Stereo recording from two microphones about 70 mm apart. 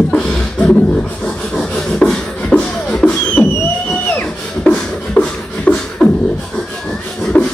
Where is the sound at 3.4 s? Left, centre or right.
Left.